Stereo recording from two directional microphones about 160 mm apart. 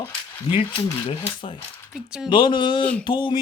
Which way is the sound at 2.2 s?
30° left (ahead or behind).